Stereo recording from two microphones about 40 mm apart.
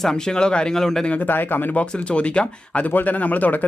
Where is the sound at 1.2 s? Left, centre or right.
Left.